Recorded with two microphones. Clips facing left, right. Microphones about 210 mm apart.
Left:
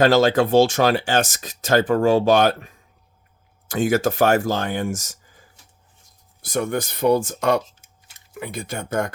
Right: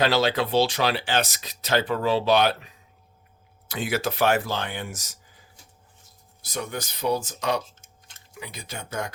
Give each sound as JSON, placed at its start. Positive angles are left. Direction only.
{"t": 0.0, "sound": "speech", "side_deg": 45}
{"t": 6.4, "sound": "speech", "side_deg": 50}